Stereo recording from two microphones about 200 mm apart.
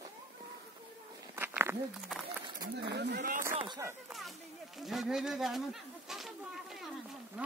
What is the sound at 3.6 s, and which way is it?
Speech, 20° right (ahead or behind).